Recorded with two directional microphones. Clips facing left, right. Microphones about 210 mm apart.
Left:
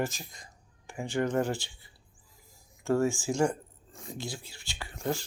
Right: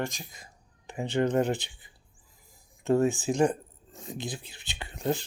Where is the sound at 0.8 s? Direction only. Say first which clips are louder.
Right 3 dB; 20° right (ahead or behind).